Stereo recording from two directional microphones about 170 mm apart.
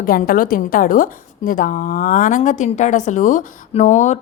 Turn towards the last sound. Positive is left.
turn(degrees=45)  # may be behind; listen again after turning